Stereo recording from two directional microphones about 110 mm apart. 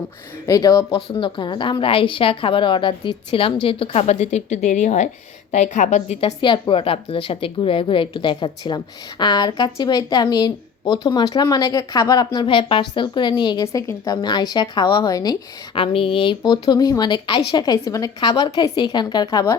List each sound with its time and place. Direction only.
0.4 s a woman's voice: 35° left (ahead or behind)
1.1 s a woman's voice: 50° left (ahead or behind)
4.0 s a woman's voice: 90° left
6.4 s a woman's voice: 50° left (ahead or behind)
15.7 s a woman's voice: 55° left (ahead or behind); by 18.1 s 30° left (ahead or behind)
18.2 s a woman's voice: 45° left (ahead or behind)